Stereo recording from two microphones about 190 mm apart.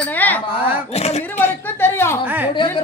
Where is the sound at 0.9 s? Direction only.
35° left (ahead or behind).